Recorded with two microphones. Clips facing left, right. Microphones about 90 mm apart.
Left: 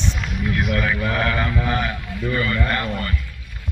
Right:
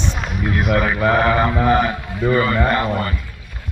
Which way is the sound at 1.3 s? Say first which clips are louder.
Right 7 dB; 30° right (ahead or behind).